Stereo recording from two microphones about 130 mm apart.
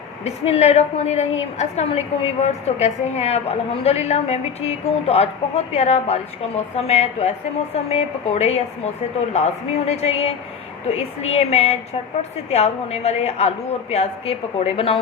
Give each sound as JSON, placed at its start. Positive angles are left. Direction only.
{"t": 0.3, "sound": "a woman's voice", "side_deg": 55}